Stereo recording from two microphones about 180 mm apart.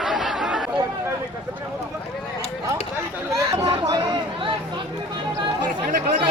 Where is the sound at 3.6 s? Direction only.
20° right (ahead or behind).